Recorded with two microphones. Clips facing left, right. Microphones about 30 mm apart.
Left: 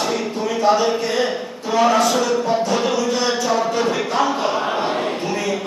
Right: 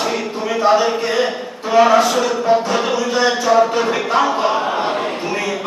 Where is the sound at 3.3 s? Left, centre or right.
Centre.